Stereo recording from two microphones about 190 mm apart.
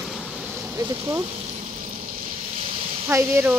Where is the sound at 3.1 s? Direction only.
10° right (ahead or behind).